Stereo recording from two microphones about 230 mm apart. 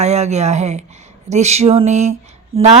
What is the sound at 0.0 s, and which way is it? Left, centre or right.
A woman's voice, right.